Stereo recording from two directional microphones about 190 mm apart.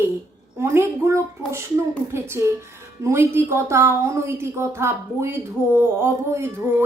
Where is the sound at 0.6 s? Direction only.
15° right (ahead or behind).